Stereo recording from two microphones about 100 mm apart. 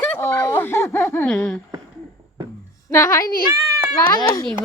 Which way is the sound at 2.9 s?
30° left (ahead or behind).